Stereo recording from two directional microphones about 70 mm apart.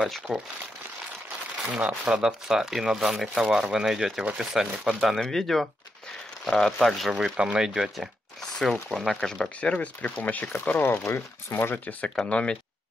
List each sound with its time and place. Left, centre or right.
0.3 s speech: centre
1.7 s speech: centre
5.1 s speech: centre
8.4 s a sound: centre
8.9 s speech: centre; by 11.0 s left
11.1 s speech: left
11.7 s speech: left